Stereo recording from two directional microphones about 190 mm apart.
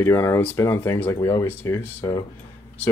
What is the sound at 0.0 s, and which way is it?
Speech, 15° left (ahead or behind).